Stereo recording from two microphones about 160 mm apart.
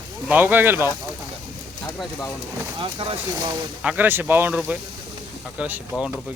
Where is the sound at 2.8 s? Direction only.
30° right (ahead or behind).